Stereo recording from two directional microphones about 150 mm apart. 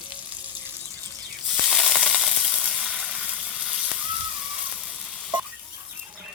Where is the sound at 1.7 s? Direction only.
Centre (ahead or behind).